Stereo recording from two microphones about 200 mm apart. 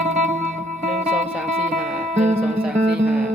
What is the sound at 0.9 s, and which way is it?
Music, 5° right (ahead or behind).